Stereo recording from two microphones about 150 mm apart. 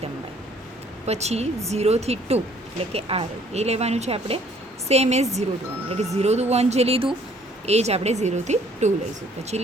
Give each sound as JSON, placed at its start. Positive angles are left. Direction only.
{"t": 1.0, "sound": "speech", "side_deg": -45}